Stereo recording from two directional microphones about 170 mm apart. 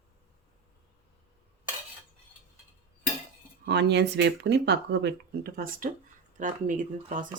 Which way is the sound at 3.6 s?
80° right.